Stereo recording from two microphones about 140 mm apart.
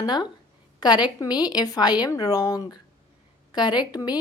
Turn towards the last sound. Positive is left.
turn(degrees=30)  # may be behind; listen again after turning